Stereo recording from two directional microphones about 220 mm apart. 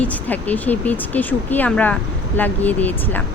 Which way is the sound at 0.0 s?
5° left (ahead or behind).